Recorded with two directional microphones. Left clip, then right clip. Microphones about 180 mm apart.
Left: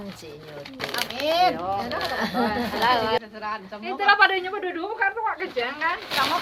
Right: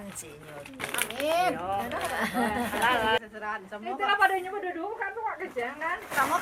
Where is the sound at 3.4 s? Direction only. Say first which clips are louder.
Left 4 dB; 40° right (ahead or behind).